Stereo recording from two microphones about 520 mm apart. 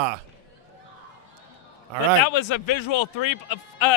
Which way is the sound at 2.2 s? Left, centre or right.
Left.